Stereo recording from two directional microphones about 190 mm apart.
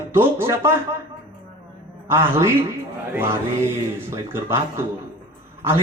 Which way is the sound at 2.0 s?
15° right (ahead or behind).